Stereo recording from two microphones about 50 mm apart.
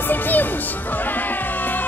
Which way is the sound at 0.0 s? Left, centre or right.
Left.